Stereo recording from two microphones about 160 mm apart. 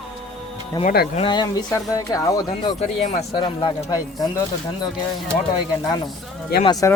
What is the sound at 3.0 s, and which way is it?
Speech, 45° left (ahead or behind).